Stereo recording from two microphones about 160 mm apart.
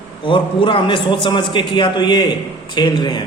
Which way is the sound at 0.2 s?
30° left (ahead or behind).